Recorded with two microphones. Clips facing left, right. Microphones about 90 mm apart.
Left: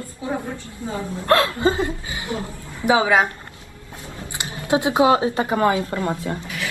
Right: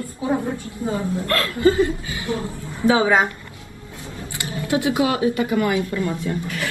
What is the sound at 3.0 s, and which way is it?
Speech, 5° left (ahead or behind).